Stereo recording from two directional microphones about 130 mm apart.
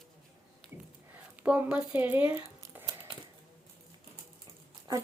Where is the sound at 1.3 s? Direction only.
10° right (ahead or behind).